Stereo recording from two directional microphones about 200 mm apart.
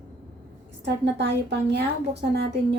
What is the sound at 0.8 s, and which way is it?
Speech, 60° right (ahead or behind).